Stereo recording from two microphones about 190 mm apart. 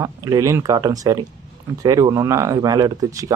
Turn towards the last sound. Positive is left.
turn(degrees=-15)  # may be behind; listen again after turning